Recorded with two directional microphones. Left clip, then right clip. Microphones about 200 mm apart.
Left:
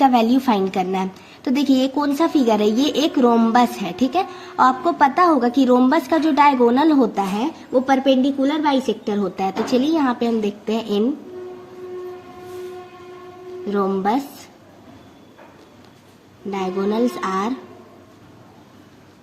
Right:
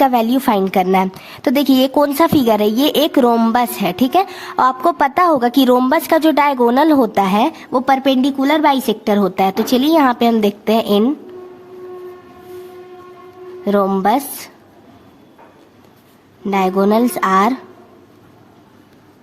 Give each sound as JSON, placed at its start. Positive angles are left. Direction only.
{"t": 0.0, "sound": "a woman's voice", "side_deg": -35}
{"t": 13.7, "sound": "speech", "side_deg": -50}
{"t": 16.5, "sound": "a woman's voice", "side_deg": -40}